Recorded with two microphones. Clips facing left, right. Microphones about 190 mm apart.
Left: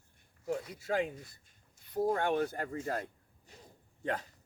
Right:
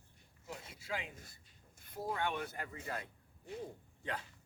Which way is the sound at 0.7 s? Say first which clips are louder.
Left 8 dB; 50° left (ahead or behind).